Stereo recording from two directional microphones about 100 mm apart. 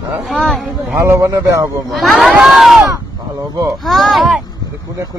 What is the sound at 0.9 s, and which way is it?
Speech, 30° right (ahead or behind).